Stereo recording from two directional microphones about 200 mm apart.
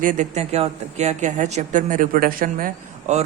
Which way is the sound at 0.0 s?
40° right (ahead or behind).